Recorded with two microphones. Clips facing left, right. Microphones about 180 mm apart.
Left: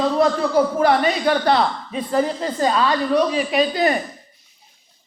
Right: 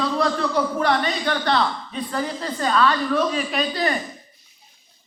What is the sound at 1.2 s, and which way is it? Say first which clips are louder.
A man's voice: left 4 dB; 30° left (ahead or behind).